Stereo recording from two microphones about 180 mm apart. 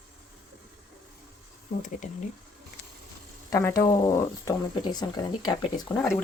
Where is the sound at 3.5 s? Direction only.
15° left (ahead or behind).